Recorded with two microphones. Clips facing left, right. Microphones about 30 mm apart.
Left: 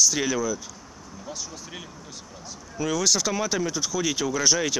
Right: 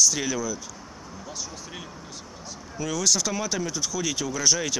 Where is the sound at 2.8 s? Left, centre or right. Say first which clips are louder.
Left 1 dB; centre.